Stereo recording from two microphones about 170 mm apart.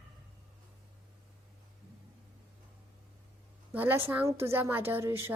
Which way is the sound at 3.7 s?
10° right (ahead or behind).